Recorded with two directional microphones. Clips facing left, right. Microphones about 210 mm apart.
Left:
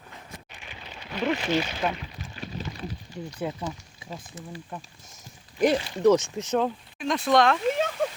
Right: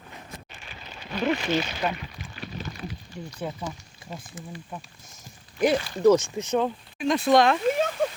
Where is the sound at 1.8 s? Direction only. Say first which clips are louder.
Even; centre (ahead or behind).